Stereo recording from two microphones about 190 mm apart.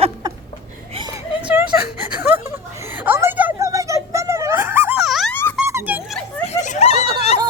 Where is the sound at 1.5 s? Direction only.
5° right (ahead or behind).